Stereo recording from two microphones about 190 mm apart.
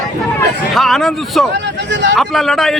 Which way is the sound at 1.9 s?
75° right (ahead or behind).